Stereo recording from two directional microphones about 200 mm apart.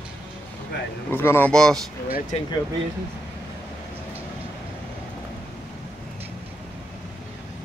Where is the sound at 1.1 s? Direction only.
10° left (ahead or behind).